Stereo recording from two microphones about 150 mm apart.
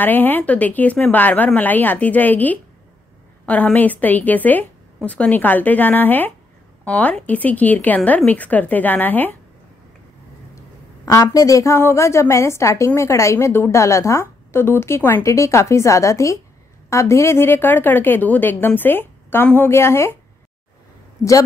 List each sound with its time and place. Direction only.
0.0 s a woman's voice: 10° left (ahead or behind)
11.1 s a woman's voice: 20° left (ahead or behind)
21.2 s speech: 20° left (ahead or behind)